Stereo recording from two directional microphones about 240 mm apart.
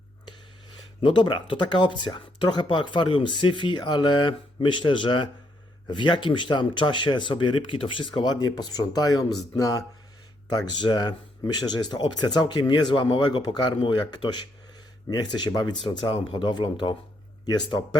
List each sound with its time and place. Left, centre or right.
1.0 s speech: centre